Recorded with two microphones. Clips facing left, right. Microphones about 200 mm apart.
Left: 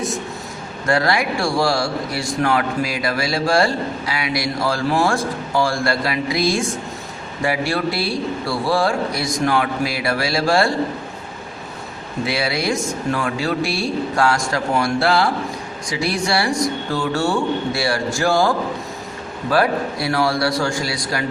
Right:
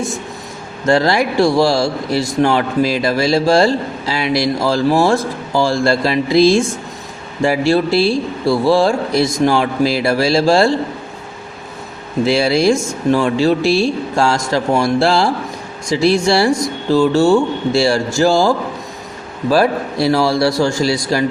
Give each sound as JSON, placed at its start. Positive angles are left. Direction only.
{"t": 0.9, "sound": "a man's voice", "side_deg": -25}
{"t": 12.4, "sound": "a man's voice", "side_deg": -25}